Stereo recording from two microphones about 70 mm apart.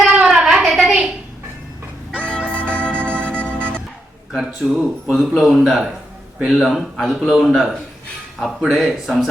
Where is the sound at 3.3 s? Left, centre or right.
Centre.